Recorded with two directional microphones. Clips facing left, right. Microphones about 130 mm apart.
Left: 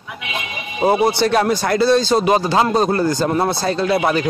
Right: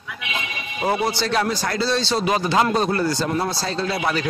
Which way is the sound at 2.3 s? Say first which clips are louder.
Left 4 dB; 30° left (ahead or behind).